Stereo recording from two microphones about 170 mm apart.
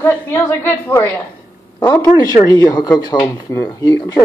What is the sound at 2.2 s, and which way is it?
A woman's voice, 20° left (ahead or behind).